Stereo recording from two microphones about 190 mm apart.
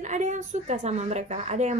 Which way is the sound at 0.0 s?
40° right (ahead or behind).